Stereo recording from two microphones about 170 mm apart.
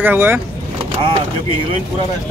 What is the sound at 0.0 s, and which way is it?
Speech, 10° right (ahead or behind).